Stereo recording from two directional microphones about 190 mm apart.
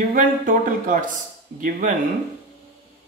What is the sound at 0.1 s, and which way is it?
Speech, 45° right (ahead or behind).